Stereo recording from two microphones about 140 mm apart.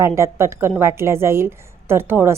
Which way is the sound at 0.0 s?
20° right (ahead or behind).